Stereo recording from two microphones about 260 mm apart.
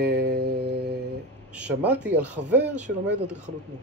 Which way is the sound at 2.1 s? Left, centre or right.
Centre.